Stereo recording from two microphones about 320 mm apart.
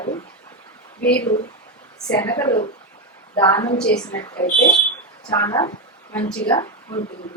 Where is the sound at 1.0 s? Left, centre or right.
Left.